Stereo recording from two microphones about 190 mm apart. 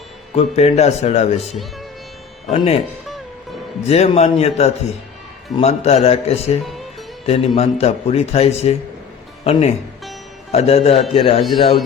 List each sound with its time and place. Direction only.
0.3 s a man's voice: 35° left (ahead or behind)
2.5 s a man's voice: 30° left (ahead or behind)
3.8 s a man's voice: 35° left (ahead or behind)